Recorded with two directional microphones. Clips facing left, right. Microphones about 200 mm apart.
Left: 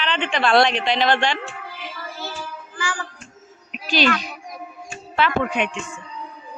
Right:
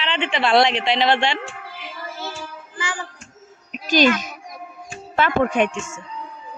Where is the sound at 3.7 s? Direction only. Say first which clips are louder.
Right 4 dB; 45° right (ahead or behind).